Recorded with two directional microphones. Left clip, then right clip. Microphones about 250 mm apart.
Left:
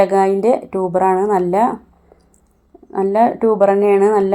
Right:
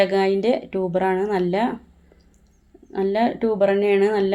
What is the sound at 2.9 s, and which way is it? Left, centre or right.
Speech, left.